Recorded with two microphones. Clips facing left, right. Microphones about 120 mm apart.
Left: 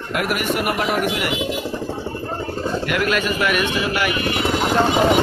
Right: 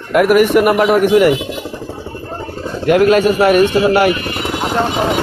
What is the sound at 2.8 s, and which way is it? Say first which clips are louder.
A man's voice: right 14 dB; 35° right (ahead or behind).